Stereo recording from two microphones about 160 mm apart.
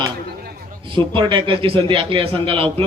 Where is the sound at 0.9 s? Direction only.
30° right (ahead or behind).